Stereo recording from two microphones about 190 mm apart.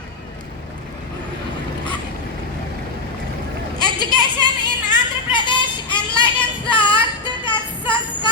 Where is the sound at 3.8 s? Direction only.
20° left (ahead or behind).